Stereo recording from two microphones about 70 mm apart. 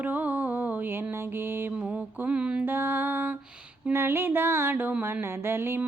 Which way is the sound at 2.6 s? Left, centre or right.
Right.